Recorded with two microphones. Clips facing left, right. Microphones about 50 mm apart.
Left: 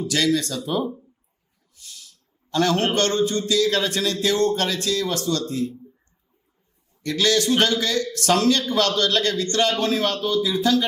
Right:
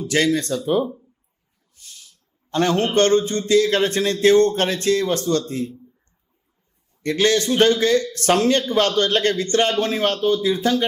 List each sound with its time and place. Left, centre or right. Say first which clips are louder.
0.1 s a man's voice: right 3 dB; right
1.8 s a sound: left 1 dB; right
2.9 s a man's voice: right 4 dB; right
7.0 s a man's voice: right 2 dB; right